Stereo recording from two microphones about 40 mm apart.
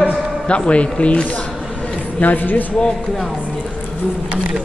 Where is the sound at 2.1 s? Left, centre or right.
Left.